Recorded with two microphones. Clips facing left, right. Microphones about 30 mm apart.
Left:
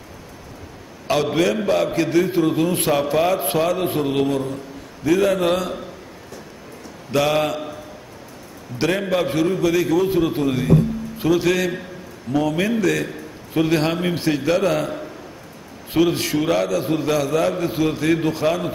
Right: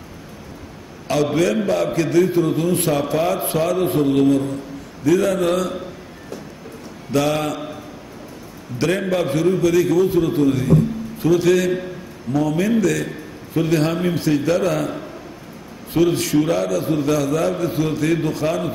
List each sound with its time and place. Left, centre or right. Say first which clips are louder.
1.0 s a man's voice: right 1 dB; centre
7.1 s a man's voice: left 1 dB; centre
9.1 s a man's voice: right 1 dB; centre
9.9 s a man's voice: right 2 dB; left
12.3 s a man's voice: right 1 dB; left
15.9 s a man's voice: right 1 dB; centre